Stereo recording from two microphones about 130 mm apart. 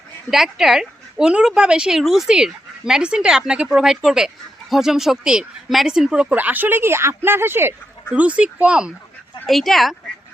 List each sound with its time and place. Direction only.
0.3 s a woman's voice: 5° right (ahead or behind)